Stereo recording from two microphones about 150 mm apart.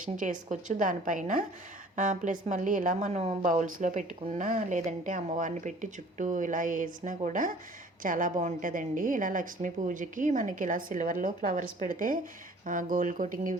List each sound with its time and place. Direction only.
0.0 s a woman's voice: 60° right (ahead or behind)